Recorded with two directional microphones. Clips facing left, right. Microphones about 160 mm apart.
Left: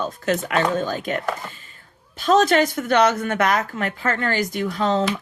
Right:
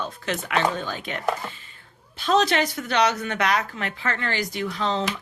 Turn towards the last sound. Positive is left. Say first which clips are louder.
# left 5 dB
turn(degrees=45)  # may be behind; listen again after turning